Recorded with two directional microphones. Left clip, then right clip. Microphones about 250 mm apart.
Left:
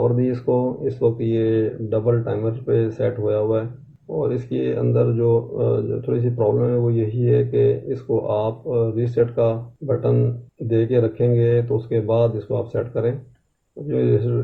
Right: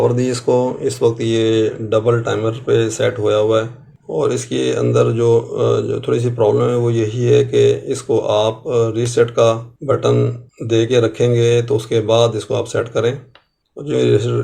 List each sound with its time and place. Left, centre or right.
0.2 s speech: centre